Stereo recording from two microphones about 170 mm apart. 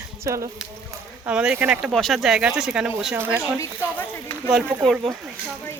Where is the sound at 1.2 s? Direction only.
5° right (ahead or behind).